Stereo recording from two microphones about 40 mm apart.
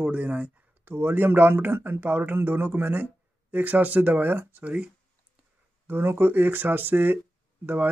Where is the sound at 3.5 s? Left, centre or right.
Right.